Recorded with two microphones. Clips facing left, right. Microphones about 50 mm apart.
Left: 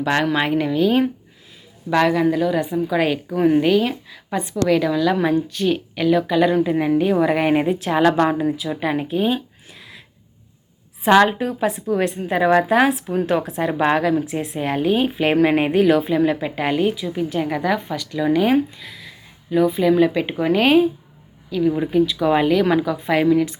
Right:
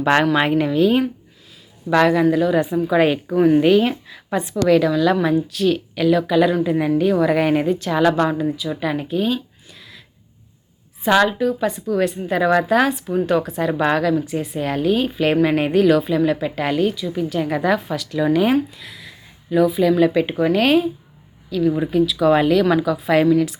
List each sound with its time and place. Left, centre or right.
0.0 s a woman's voice: centre; by 10.0 s left
11.0 s a woman's voice: left
11.6 s a woman's voice: left
17.5 s a woman's voice: centre
18.8 s a sound: centre
20.0 s a woman's voice: centre